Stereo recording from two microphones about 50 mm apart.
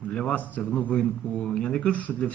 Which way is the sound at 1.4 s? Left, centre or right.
Centre.